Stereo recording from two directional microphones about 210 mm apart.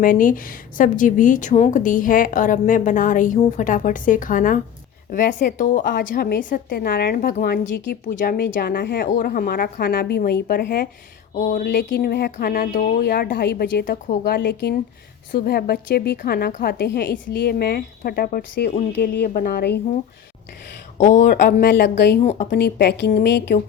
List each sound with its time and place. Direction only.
0.0 s a woman's voice: 40° left (ahead or behind)
21.0 s a woman's voice: 35° left (ahead or behind)
21.4 s a woman's voice: 55° left (ahead or behind)
22.2 s a woman's voice: 35° left (ahead or behind)
22.6 s a woman's voice: 50° left (ahead or behind)